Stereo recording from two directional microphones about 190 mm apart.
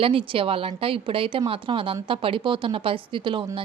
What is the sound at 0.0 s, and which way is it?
A woman's voice, 30° right (ahead or behind).